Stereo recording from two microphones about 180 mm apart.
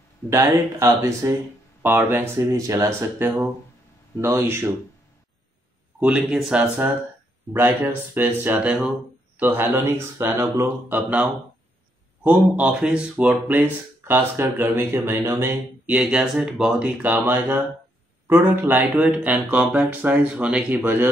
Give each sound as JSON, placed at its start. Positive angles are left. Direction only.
{"t": 0.3, "sound": "speech", "side_deg": -15}
{"t": 5.9, "sound": "speech", "side_deg": -5}